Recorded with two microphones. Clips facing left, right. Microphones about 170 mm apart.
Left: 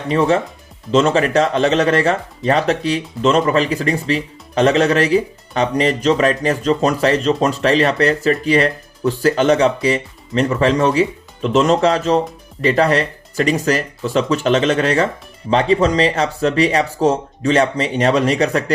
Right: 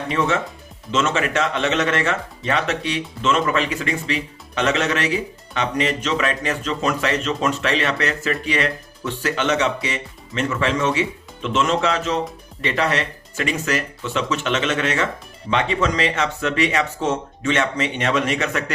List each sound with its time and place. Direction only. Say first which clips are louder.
0.1 s speech: left 7 dB; 35° left (ahead or behind)